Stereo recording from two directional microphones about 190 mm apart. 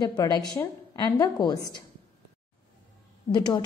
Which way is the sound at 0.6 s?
20° left (ahead or behind).